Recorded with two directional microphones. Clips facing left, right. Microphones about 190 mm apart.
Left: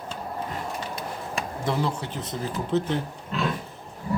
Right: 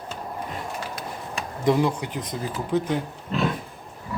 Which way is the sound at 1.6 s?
15° right (ahead or behind).